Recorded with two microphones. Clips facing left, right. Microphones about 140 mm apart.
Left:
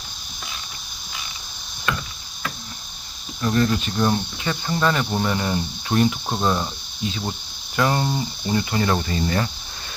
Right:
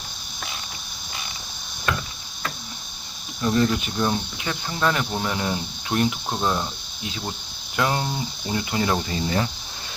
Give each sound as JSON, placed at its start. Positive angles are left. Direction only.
{"t": 3.4, "sound": "speech", "side_deg": -15}
{"t": 3.9, "sound": "speech", "side_deg": 0}